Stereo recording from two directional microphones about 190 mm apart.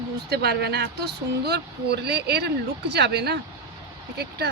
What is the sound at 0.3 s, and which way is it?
Speech, 60° right (ahead or behind).